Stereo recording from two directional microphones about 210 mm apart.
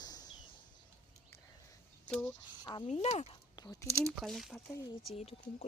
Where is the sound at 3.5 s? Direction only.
20° left (ahead or behind).